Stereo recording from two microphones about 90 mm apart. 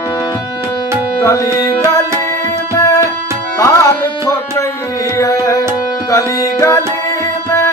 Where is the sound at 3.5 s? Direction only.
35° left (ahead or behind).